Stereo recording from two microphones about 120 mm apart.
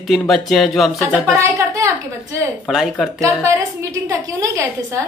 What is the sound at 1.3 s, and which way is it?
Speech, 25° right (ahead or behind).